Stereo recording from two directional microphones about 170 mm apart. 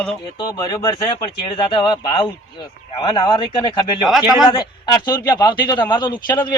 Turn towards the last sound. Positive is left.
turn(degrees=25)  # may be behind; listen again after turning